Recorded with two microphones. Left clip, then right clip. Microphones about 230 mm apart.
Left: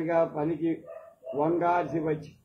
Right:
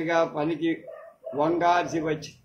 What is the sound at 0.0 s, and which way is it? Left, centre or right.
A man's voice, right.